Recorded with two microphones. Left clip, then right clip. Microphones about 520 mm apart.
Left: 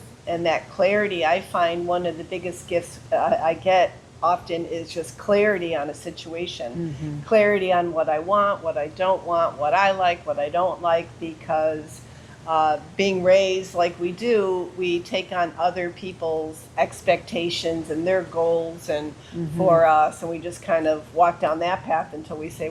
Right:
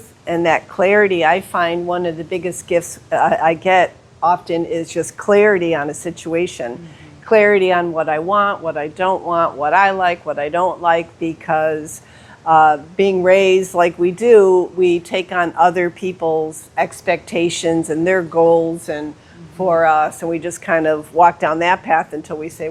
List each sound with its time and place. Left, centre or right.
0.3 s speech: right